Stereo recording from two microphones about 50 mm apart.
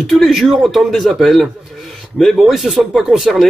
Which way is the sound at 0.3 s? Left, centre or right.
Centre.